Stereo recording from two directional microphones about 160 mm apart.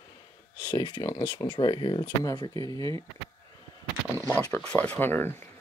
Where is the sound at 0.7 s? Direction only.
25° left (ahead or behind).